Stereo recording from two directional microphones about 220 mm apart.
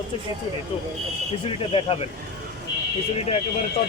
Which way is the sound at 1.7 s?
25° left (ahead or behind).